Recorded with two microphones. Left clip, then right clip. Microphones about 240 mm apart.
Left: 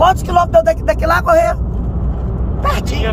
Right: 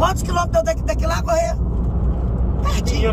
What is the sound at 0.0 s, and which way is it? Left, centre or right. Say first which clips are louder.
Speech: left 8 dB; centre.